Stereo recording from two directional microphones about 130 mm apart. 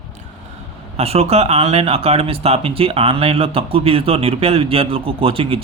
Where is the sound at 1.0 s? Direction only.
50° right (ahead or behind).